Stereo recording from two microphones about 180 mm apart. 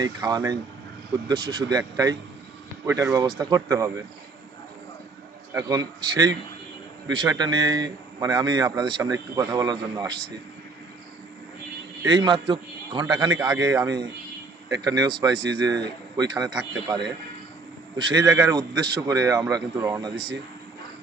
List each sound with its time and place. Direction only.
0.0 s a man's voice: 20° right (ahead or behind)
5.5 s a man's voice: 20° right (ahead or behind)
12.0 s a man's voice: 25° right (ahead or behind)